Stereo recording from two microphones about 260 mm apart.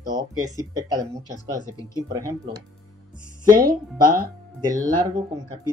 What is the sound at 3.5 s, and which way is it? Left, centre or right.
Speech, right.